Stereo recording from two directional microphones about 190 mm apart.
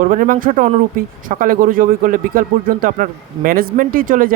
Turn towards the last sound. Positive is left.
turn(degrees=-45)  # may be behind; listen again after turning